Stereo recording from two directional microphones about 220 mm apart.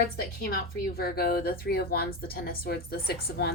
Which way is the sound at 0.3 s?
45° left (ahead or behind).